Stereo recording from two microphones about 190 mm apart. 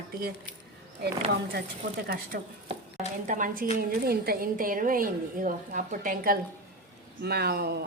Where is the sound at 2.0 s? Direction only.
50° right (ahead or behind).